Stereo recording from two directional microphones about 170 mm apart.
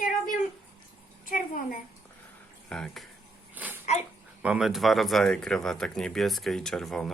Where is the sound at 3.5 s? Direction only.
10° right (ahead or behind).